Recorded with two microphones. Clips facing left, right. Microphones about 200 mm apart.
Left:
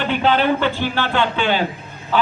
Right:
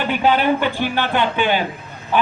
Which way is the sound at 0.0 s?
10° right (ahead or behind).